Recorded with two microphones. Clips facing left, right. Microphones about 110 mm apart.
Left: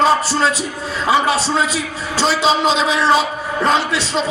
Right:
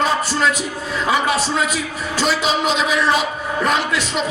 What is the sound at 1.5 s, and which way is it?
Speech, 30° left (ahead or behind).